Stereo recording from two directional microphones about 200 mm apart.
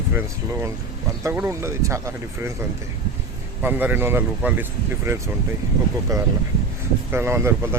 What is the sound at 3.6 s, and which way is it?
Speech, 10° right (ahead or behind).